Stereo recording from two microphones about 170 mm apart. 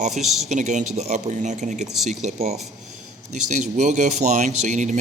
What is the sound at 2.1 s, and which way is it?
Speech, 40° right (ahead or behind).